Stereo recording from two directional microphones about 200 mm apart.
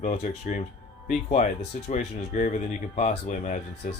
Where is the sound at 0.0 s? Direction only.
35° left (ahead or behind).